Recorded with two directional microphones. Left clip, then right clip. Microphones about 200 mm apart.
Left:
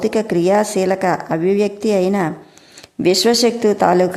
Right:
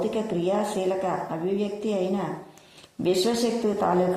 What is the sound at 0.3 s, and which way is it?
A woman's voice, 25° left (ahead or behind).